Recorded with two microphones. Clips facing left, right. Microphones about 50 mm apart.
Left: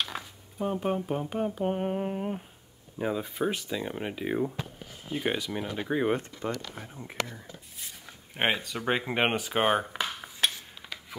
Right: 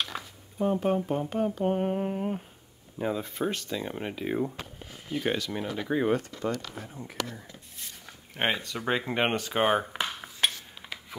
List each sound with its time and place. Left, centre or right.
0.0 s speech: centre
5.1 s speech: centre
8.4 s speech: centre
9.9 s a sound: centre